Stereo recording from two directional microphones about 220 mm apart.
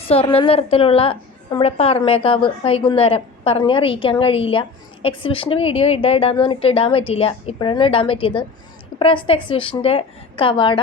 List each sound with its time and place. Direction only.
0.1 s a woman's voice: 25° left (ahead or behind)